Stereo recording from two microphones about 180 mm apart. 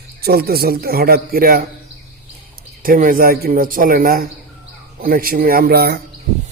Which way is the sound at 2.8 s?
50° right (ahead or behind).